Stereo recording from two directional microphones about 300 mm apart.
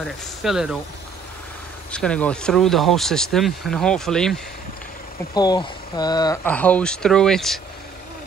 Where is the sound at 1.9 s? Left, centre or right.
Centre.